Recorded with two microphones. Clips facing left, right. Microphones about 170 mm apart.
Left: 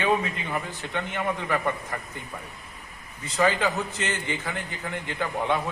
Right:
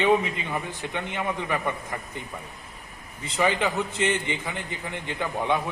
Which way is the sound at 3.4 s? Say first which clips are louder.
Even; 15° right (ahead or behind).